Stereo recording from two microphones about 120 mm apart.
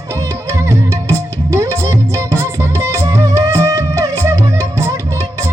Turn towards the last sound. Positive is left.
turn(degrees=-25)  # may be behind; listen again after turning